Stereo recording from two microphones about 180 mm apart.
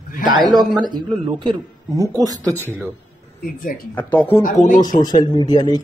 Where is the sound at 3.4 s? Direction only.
55° left (ahead or behind).